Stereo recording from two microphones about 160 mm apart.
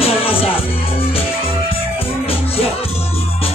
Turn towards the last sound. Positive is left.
turn(degrees=35)  # may be behind; listen again after turning